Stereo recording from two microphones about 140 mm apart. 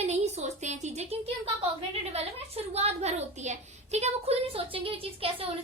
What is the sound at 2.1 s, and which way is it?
A child's voice, 45° right (ahead or behind).